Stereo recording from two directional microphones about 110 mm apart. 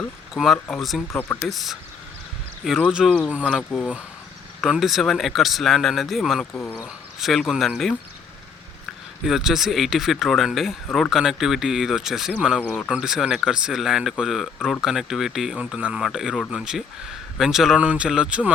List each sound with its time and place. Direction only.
0.3 s speech: centre (ahead or behind)
2.9 s speech: 5° right (ahead or behind)
3.6 s speech: 5° left (ahead or behind)
6.5 s speech: 20° left (ahead or behind)
6.8 s speech: centre (ahead or behind)
9.2 s speech: 5° right (ahead or behind)
12.6 s speech: 15° left (ahead or behind)
12.9 s speech: 5° right (ahead or behind)